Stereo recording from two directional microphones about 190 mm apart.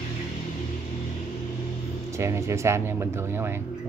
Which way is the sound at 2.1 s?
15° right (ahead or behind).